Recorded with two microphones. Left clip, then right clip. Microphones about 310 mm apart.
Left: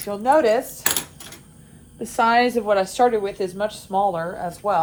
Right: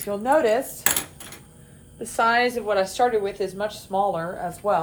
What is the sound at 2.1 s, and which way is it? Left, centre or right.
A woman's voice, centre.